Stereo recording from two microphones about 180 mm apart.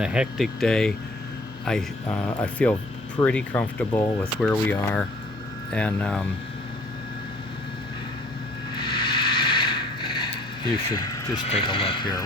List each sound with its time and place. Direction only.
0.0 s speech: 5° right (ahead or behind)
8.7 s vehicle: 25° left (ahead or behind)
10.9 s speech: 20° left (ahead or behind)
11.4 s speech: 35° left (ahead or behind)